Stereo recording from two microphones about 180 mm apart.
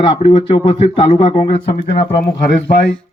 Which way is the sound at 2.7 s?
60° left (ahead or behind).